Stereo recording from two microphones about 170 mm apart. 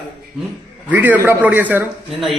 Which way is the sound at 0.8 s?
10° right (ahead or behind).